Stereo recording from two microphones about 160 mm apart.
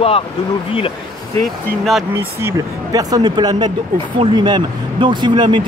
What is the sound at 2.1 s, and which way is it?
Speech, 20° right (ahead or behind).